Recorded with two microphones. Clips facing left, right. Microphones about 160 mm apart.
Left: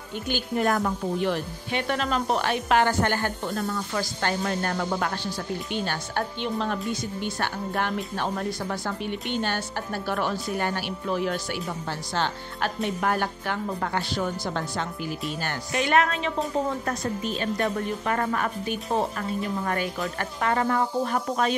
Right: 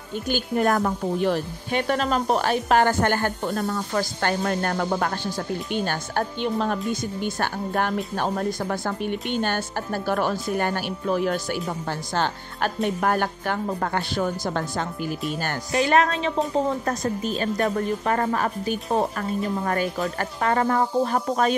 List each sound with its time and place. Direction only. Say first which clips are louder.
0.3 s a woman's voice: right 3 dB; 45° right (ahead or behind)